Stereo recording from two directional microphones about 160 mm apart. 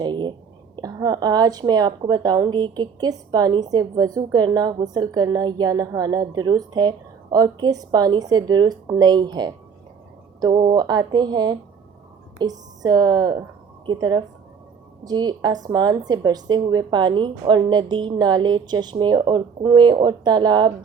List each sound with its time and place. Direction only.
0.0 s a woman's voice: 30° right (ahead or behind)